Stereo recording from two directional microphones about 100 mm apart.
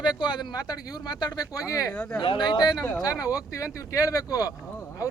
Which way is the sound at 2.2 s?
55° left (ahead or behind).